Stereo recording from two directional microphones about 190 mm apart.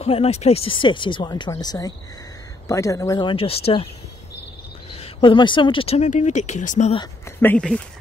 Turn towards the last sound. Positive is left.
turn(degrees=5)  # may be behind; listen again after turning